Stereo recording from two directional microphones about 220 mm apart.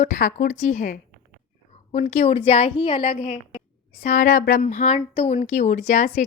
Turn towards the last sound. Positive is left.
turn(degrees=30)  # may be behind; listen again after turning